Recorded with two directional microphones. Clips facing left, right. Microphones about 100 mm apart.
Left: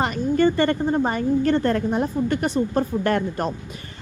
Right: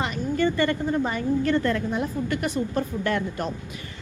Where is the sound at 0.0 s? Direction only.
40° left (ahead or behind).